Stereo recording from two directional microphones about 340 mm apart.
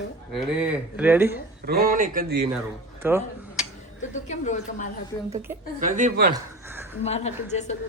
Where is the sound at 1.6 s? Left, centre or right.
Right.